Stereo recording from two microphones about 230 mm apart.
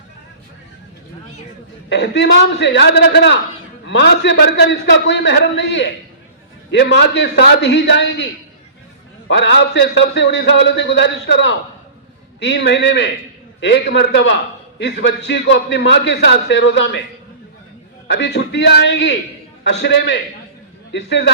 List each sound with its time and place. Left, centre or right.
1.9 s a man's voice: left
18.1 s a man's voice: left